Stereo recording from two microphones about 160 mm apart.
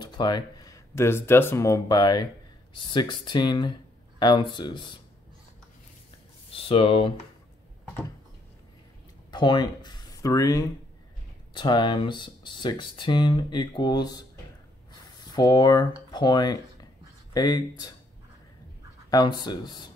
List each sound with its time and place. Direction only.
0.0 s speech: 25° left (ahead or behind)
6.5 s speech: 35° left (ahead or behind)
9.3 s speech: 30° left (ahead or behind)
19.0 s speech: 25° left (ahead or behind)